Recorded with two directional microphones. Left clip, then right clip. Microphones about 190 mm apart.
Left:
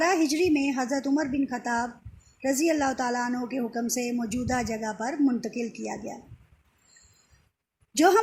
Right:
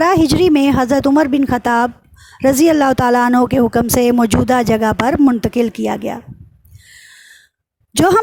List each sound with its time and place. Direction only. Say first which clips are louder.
0.0 s speech: right 12 dB; 50° right (ahead or behind)
7.9 s speech: right 8 dB; 50° right (ahead or behind)